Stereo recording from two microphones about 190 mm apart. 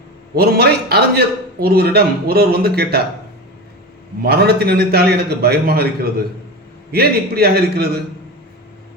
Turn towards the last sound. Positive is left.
turn(degrees=-55)  # may be behind; listen again after turning